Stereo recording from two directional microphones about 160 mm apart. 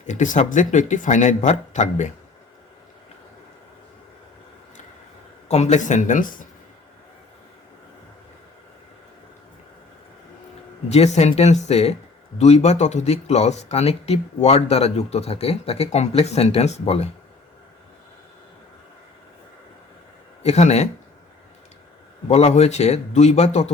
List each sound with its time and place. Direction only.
0.0 s speech: 50° left (ahead or behind)
5.5 s speech: 45° left (ahead or behind)
10.8 s speech: 45° left (ahead or behind)
20.4 s speech: 45° left (ahead or behind)
22.3 s speech: 40° left (ahead or behind)